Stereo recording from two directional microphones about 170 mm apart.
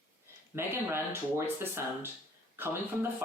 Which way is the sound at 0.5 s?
15° right (ahead or behind).